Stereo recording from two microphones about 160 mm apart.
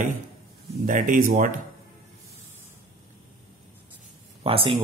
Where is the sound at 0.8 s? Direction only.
55° right (ahead or behind).